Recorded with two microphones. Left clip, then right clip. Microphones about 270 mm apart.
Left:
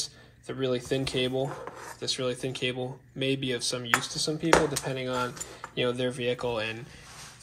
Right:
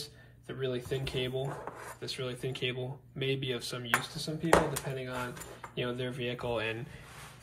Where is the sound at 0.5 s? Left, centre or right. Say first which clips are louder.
Left 6 dB; left.